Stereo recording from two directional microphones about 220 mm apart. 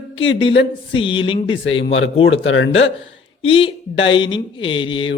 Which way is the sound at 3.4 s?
25° left (ahead or behind).